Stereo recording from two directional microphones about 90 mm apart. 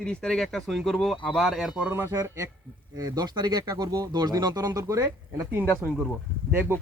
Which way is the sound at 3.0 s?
50° right (ahead or behind).